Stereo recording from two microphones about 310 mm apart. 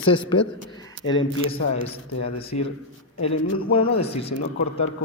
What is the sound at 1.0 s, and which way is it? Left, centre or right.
Speech, left.